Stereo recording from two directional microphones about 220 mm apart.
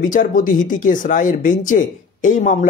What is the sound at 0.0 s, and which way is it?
Speech, 35° left (ahead or behind).